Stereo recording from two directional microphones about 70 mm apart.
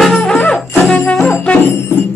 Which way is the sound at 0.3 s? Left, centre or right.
Centre.